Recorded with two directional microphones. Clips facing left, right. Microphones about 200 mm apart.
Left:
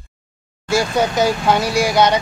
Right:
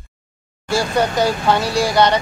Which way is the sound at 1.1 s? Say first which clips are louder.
Left 1 dB; 15° left (ahead or behind).